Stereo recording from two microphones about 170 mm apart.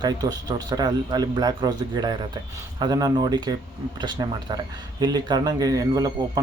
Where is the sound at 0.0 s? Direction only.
25° right (ahead or behind).